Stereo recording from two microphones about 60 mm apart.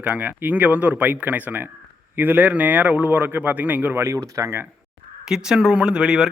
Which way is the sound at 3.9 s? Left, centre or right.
Right.